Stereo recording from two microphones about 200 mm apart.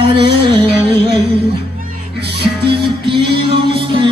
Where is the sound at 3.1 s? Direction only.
25° right (ahead or behind).